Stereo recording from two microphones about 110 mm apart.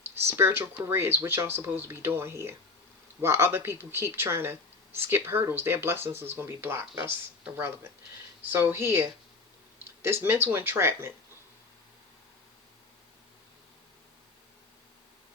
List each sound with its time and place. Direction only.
0.2 s speech: 25° right (ahead or behind)
8.4 s speech: 15° right (ahead or behind)